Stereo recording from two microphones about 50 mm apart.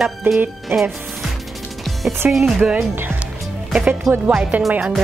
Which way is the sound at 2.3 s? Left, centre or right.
Centre.